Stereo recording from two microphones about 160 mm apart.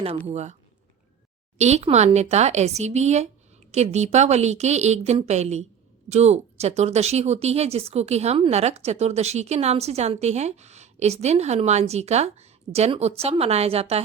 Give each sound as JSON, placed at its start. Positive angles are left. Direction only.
{"t": 0.3, "sound": "speech", "side_deg": -45}
{"t": 1.5, "sound": "speech", "side_deg": -45}